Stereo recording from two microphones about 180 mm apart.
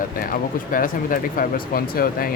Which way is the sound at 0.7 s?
50° left (ahead or behind).